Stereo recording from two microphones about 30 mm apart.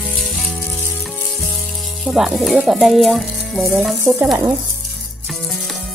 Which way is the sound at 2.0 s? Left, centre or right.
Centre.